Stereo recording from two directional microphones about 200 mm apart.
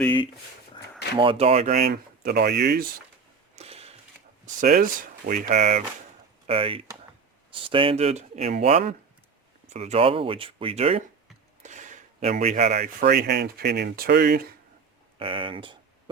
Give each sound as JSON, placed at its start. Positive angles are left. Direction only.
{"t": 1.1, "sound": "speech", "side_deg": -25}
{"t": 1.9, "sound": "speech", "side_deg": -55}
{"t": 3.5, "sound": "a sound", "side_deg": -30}
{"t": 4.6, "sound": "speech", "side_deg": -45}
{"t": 9.7, "sound": "speech", "side_deg": -30}
{"t": 15.2, "sound": "speech", "side_deg": -25}